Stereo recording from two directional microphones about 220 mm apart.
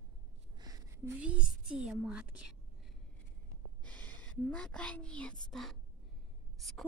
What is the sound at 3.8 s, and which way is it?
A woman's voice, 5° left (ahead or behind).